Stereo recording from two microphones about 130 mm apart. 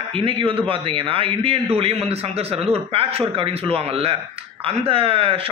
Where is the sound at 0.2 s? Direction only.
45° right (ahead or behind).